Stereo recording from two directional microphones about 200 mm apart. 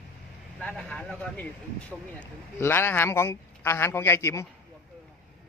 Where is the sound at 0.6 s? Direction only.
5° left (ahead or behind).